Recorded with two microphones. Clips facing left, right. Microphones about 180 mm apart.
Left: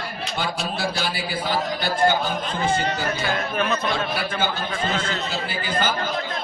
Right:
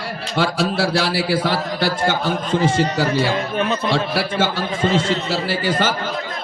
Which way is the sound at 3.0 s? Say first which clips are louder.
Right 6 dB; 30° right (ahead or behind).